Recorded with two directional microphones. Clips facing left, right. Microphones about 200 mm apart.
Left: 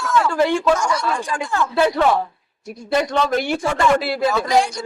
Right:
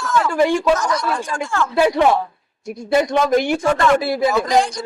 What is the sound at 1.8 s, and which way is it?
Speech, 15° right (ahead or behind).